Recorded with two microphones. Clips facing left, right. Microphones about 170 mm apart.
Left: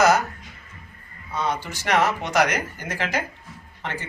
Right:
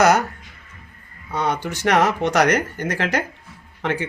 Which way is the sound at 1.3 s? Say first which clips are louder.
Right 3 dB; 60° right (ahead or behind).